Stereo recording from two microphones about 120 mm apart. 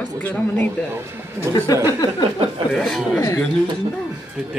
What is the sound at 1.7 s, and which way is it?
Speech, 30° left (ahead or behind).